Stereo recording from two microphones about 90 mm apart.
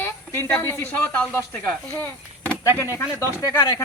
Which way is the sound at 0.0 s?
25° left (ahead or behind).